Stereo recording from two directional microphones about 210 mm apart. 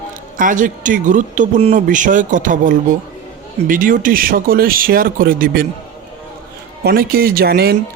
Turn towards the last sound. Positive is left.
turn(degrees=-50)  # may be behind; listen again after turning